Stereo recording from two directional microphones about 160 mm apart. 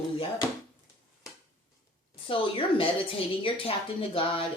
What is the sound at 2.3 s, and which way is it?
Speech, 35° left (ahead or behind).